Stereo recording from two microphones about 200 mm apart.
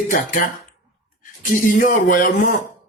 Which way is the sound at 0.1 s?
40° left (ahead or behind).